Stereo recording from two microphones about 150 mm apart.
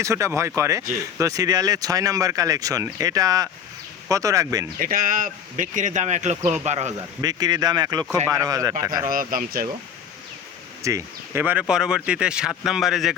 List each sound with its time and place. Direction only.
0.0 s speech: 20° right (ahead or behind)
4.8 s speech: 70° right (ahead or behind); by 6.9 s 50° right (ahead or behind)
7.2 s speech: 25° right (ahead or behind)
9.0 s speech: 70° right (ahead or behind)
10.8 s speech: 15° right (ahead or behind); by 13.1 s centre (ahead or behind)